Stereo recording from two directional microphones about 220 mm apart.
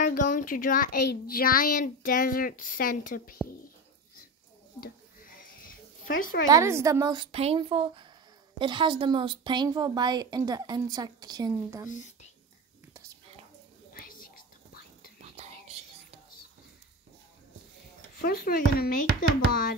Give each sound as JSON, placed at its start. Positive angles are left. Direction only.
{"t": 0.0, "sound": "a child's voice", "side_deg": 40}
{"t": 4.7, "sound": "a sound", "side_deg": 40}
{"t": 6.4, "sound": "a woman's voice", "side_deg": -15}
{"t": 11.9, "sound": "speech", "side_deg": 35}
{"t": 13.9, "sound": "whispering", "side_deg": 40}
{"t": 15.1, "sound": "whispering", "side_deg": -30}
{"t": 18.2, "sound": "speech", "side_deg": 45}